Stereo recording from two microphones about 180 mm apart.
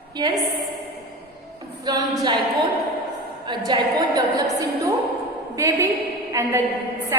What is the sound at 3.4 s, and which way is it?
A woman's voice, 25° right (ahead or behind).